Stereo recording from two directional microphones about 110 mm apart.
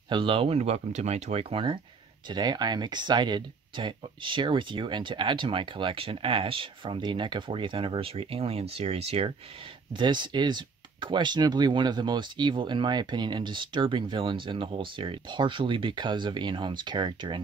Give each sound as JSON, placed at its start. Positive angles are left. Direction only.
{"t": 0.1, "sound": "speech", "side_deg": -50}
{"t": 2.2, "sound": "speech", "side_deg": -40}
{"t": 9.9, "sound": "speech", "side_deg": -45}